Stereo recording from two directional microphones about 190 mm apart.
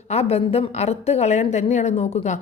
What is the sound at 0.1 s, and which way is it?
A woman's voice, 35° left (ahead or behind).